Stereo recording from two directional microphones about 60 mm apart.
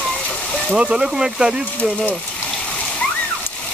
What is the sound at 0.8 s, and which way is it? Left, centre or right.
Speech, centre.